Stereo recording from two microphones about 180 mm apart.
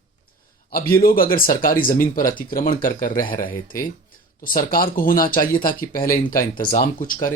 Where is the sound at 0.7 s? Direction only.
55° left (ahead or behind).